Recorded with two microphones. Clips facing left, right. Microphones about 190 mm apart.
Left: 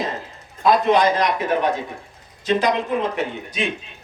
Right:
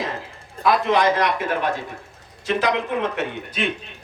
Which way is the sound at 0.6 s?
20° left (ahead or behind).